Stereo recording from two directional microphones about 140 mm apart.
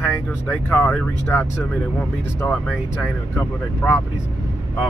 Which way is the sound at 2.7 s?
10° left (ahead or behind).